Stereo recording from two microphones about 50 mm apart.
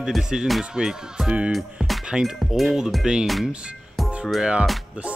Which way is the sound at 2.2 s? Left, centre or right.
Centre.